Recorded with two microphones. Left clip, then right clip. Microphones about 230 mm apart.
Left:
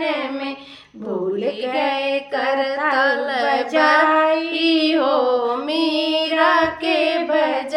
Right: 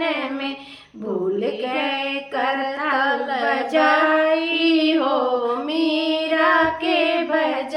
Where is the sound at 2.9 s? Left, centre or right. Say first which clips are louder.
Even; left.